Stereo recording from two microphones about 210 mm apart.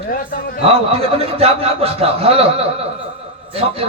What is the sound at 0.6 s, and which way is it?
Speech, 30° right (ahead or behind).